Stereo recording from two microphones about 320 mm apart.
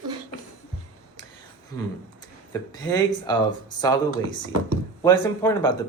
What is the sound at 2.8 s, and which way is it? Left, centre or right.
Speech, centre.